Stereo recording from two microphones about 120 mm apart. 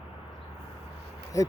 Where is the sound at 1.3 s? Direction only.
25° left (ahead or behind).